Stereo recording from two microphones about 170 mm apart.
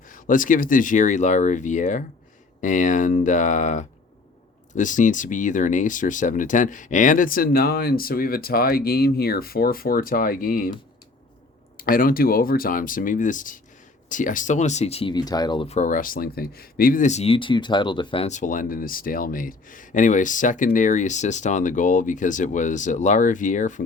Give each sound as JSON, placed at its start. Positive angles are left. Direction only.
{"t": 0.1, "sound": "speech", "side_deg": 50}
{"t": 11.8, "sound": "speech", "side_deg": 55}
{"t": 15.1, "sound": "speech", "side_deg": 25}
{"t": 18.3, "sound": "speech", "side_deg": 50}